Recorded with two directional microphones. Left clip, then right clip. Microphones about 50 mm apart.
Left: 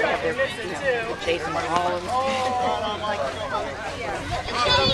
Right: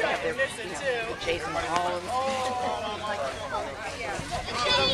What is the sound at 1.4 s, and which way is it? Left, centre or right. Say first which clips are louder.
Speech: left 4 dB; right.